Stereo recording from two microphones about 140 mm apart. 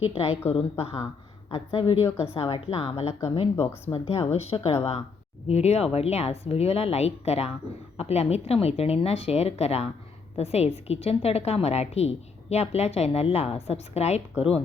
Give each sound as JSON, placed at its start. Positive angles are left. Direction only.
{"t": 0.1, "sound": "a woman's voice", "side_deg": 45}